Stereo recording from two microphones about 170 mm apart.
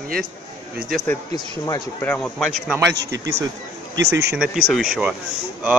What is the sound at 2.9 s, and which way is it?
Speech, 90° right.